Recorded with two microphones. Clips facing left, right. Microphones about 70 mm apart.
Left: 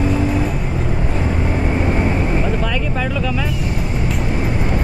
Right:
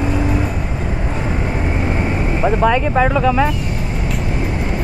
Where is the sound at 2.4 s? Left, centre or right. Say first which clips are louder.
Right 6 dB; right.